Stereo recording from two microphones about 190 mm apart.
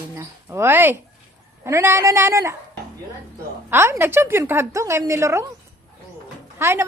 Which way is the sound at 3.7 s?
15° right (ahead or behind).